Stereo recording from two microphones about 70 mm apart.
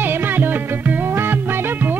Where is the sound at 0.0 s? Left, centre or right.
Right.